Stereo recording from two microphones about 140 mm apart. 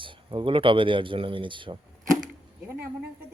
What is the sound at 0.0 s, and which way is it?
Speech, 35° right (ahead or behind).